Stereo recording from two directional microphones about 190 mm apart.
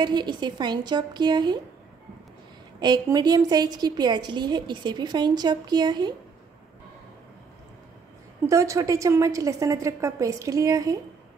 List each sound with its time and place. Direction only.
0.0 s a woman's voice: 20° right (ahead or behind)
2.8 s a woman's voice: 20° right (ahead or behind)
8.5 s a woman's voice: 15° right (ahead or behind)